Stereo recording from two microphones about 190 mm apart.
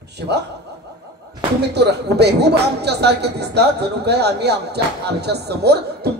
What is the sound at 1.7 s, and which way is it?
Speech, 60° right (ahead or behind).